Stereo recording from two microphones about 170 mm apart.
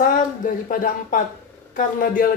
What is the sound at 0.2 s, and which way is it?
Speech, 50° left (ahead or behind).